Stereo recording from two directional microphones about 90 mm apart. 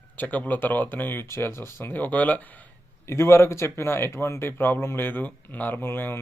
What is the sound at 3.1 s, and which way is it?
Speech, 30° left (ahead or behind).